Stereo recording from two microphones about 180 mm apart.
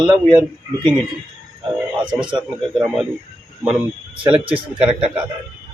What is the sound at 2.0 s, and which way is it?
A man's voice, 5° right (ahead or behind).